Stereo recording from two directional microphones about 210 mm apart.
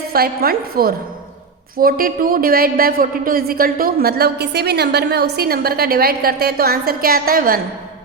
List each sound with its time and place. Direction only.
0.1 s speech: 45° right (ahead or behind)